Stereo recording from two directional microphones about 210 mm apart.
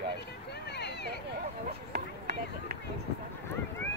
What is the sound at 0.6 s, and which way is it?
Speech, 55° left (ahead or behind).